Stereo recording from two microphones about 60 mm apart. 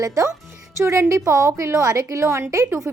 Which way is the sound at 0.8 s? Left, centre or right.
Right.